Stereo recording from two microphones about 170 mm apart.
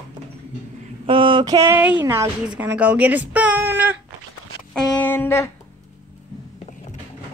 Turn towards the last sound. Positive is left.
turn(degrees=15)  # may be behind; listen again after turning